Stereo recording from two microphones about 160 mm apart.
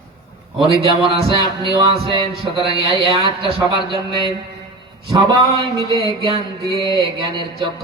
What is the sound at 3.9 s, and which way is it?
Music, 30° right (ahead or behind).